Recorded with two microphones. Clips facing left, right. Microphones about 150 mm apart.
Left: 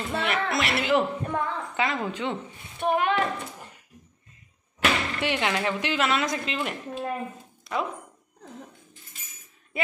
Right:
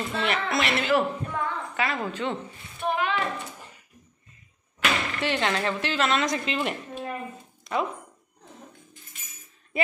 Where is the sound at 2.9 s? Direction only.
50° left (ahead or behind).